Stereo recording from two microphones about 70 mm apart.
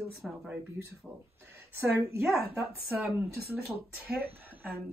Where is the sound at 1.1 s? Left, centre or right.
Centre.